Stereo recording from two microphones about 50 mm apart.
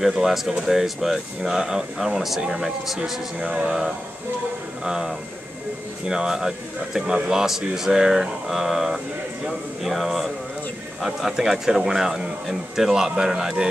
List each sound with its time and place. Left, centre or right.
0.0 s speech: centre